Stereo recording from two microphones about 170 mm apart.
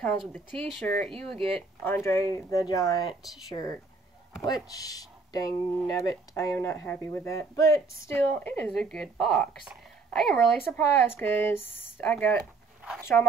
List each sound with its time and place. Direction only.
0.5 s speech: 5° left (ahead or behind)